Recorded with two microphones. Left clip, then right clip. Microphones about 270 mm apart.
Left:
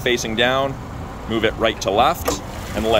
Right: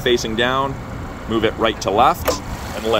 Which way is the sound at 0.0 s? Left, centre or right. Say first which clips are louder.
Right 1 dB; centre.